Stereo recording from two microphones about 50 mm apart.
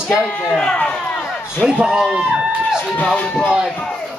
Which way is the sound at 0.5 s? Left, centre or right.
Centre.